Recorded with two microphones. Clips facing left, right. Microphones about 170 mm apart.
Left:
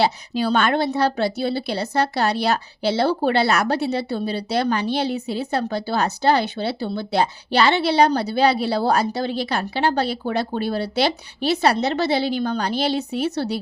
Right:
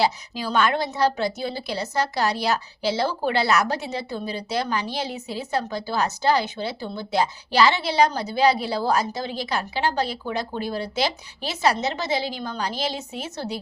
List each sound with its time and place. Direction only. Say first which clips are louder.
0.0 s a woman's voice: left 4 dB; 60° left (ahead or behind)